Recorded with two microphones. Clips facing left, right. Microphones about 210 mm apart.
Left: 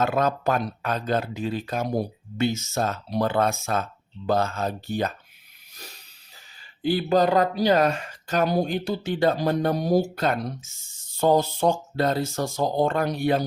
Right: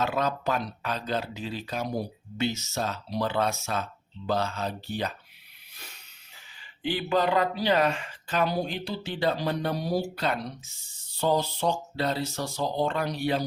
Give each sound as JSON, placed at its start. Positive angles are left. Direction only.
{"t": 0.0, "sound": "speech", "side_deg": 50}
{"t": 5.7, "sound": "hiss", "side_deg": 40}
{"t": 6.8, "sound": "speech", "side_deg": 40}